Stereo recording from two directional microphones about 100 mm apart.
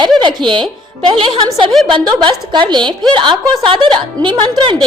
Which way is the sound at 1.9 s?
55° right (ahead or behind).